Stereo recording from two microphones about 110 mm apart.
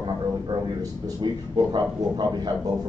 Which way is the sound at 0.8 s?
40° right (ahead or behind).